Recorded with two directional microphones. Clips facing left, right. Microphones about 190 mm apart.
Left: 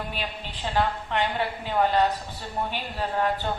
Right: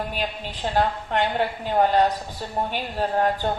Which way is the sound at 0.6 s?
45° right (ahead or behind).